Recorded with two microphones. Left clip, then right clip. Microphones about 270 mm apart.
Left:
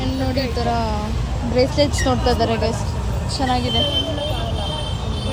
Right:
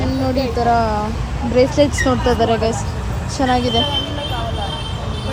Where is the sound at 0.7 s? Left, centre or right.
Centre.